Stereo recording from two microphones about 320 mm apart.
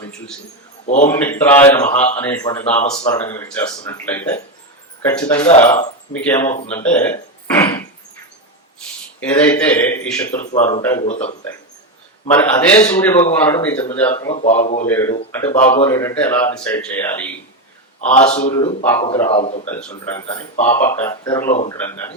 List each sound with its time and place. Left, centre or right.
1.0 s speech: centre
2.9 s a man's voice: left
3.2 s a man's voice: centre
6.1 s a man's voice: centre
9.2 s speech: centre
10.4 s a man's voice: left
12.3 s a man's voice: centre
14.3 s a man's voice: left
14.8 s a man's voice: centre
18.1 s a man's voice: left
20.1 s a man's voice: centre